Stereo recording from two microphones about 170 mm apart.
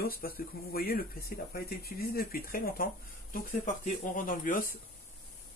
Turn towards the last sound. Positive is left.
turn(degrees=55)  # may be behind; listen again after turning